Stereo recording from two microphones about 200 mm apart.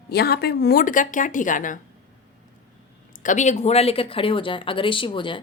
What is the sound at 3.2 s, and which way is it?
Speech, 40° left (ahead or behind).